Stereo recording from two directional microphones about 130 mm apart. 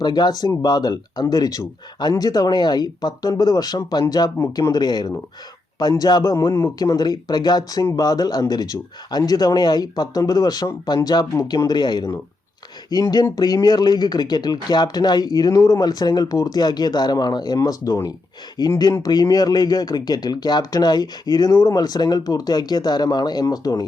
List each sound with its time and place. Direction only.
0.0 s a man's voice: 35° left (ahead or behind)